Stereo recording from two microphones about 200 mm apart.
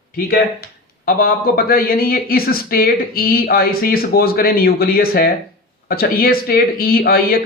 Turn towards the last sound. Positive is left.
turn(degrees=50)  # may be behind; listen again after turning